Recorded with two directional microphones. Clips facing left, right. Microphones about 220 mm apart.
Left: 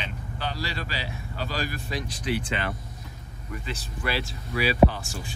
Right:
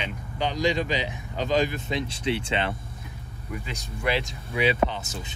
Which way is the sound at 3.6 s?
15° right (ahead or behind).